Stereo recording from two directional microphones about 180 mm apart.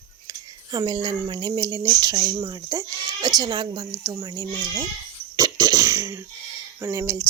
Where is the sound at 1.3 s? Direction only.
25° right (ahead or behind).